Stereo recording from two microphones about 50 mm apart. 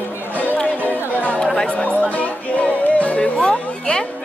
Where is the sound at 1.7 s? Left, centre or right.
Left.